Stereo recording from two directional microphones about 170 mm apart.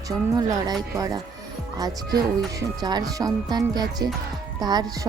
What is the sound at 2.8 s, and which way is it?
Speech, 25° right (ahead or behind).